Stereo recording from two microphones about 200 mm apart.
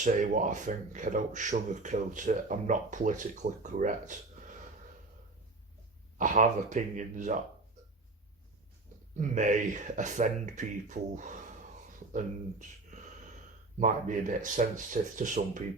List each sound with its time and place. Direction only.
0.0 s speech: 40° right (ahead or behind)
6.1 s speech: 40° right (ahead or behind)
9.1 s speech: 40° right (ahead or behind)